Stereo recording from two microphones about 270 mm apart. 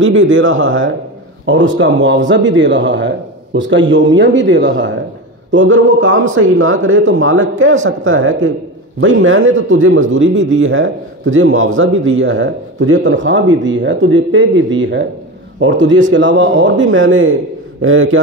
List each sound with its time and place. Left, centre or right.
0.0 s a man's voice: right